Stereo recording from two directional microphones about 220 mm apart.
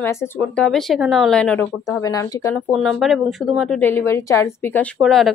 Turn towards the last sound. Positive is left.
turn(degrees=0)  # may be behind; listen again after turning